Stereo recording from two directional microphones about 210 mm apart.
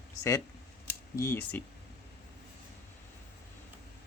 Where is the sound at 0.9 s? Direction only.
10° left (ahead or behind).